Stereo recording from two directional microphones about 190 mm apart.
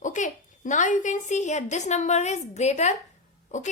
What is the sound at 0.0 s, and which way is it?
A woman's voice, 40° left (ahead or behind).